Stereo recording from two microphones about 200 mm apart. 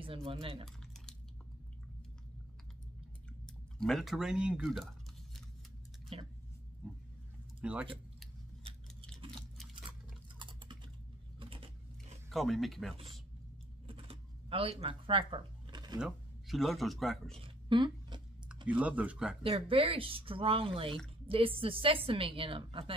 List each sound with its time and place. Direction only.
0.0 s a woman's voice: 25° right (ahead or behind)
3.7 s speech: centre (ahead or behind)
6.1 s a woman's voice: 25° right (ahead or behind)
7.6 s speech: 5° right (ahead or behind)
10.4 s typing: 25° right (ahead or behind)
11.3 s biting: 25° right (ahead or behind)
12.3 s speech: centre (ahead or behind)
13.8 s a sound: 30° right (ahead or behind)
16.0 s speech: centre (ahead or behind)
17.4 s a sound: 25° right (ahead or behind)
18.7 s speech: 5° right (ahead or behind)
19.5 s a woman's voice: 25° right (ahead or behind)